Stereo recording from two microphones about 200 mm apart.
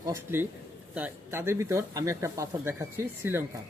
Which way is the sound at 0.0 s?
15° right (ahead or behind).